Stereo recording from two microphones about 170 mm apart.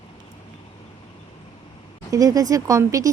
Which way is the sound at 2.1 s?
20° right (ahead or behind).